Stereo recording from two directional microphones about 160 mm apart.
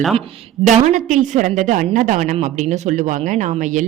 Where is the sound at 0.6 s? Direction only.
50° right (ahead or behind).